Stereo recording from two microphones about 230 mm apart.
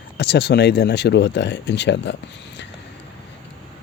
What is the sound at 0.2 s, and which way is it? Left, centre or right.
Speech, left.